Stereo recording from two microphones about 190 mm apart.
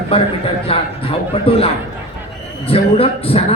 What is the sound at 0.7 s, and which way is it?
A man's voice, 30° left (ahead or behind).